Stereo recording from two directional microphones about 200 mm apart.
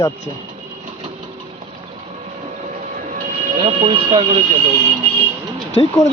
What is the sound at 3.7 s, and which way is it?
Speech, 25° right (ahead or behind).